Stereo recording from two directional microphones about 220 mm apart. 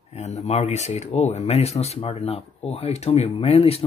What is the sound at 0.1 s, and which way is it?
Speech, 30° left (ahead or behind).